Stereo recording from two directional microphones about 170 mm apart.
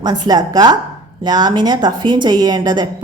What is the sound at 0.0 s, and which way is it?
A woman's voice, 25° right (ahead or behind).